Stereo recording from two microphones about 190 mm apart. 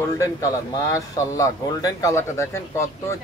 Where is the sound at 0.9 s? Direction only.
15° left (ahead or behind).